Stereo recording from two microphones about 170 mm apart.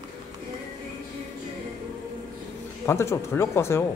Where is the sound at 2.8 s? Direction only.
15° left (ahead or behind).